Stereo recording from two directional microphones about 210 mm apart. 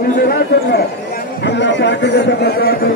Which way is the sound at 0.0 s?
45° left (ahead or behind).